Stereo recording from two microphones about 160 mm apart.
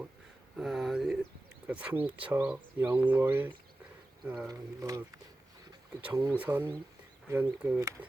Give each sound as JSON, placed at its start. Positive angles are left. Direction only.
{"t": 0.5, "sound": "speech", "side_deg": -5}
{"t": 4.3, "sound": "speech", "side_deg": 0}
{"t": 4.8, "sound": "speech", "side_deg": -20}
{"t": 6.3, "sound": "speech", "side_deg": -10}